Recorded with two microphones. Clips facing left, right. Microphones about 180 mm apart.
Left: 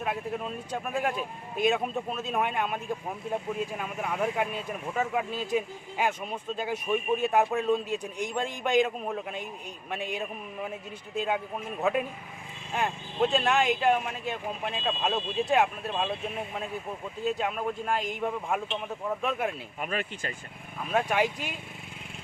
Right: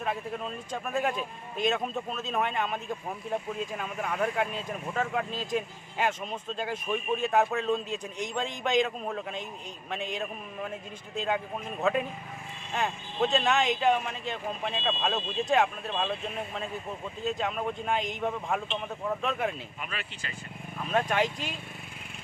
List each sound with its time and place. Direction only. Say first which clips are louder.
0.0 s speech: left 1 dB; 5° left (ahead or behind)
17.2 s speech: left 1 dB; 10° left (ahead or behind)
19.8 s speech: left 9 dB; 50° left (ahead or behind)
20.7 s speech: left 1 dB; 10° left (ahead or behind)